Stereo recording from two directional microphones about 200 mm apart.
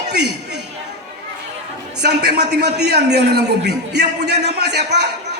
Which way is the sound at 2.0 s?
55° right (ahead or behind).